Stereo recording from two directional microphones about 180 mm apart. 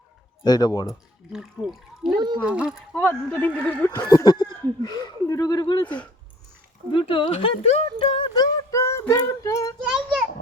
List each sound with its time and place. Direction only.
0.4 s speech: 20° left (ahead or behind)
1.3 s speech: 5° right (ahead or behind)
2.1 s speech: 25° right (ahead or behind)
2.4 s speech: 5° right (ahead or behind)
3.0 s speech: 10° left (ahead or behind)
4.1 s speech: 20° left (ahead or behind)
6.9 s speech: 30° left (ahead or behind)